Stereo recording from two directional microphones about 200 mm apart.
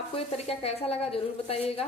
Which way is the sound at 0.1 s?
30° left (ahead or behind).